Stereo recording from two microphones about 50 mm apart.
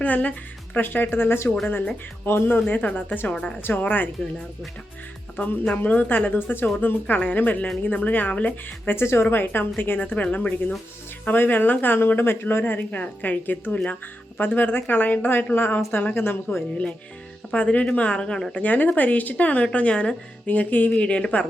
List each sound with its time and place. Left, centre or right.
0.0 s speech: left
0.8 s speech: left
3.6 s speech: left
5.6 s speech: left
8.9 s speech: left
10.0 s speech: left
11.3 s speech: left
15.9 s speech: left
16.1 s speech: left
17.5 s speech: left
18.5 s speech: left
20.9 s speech: left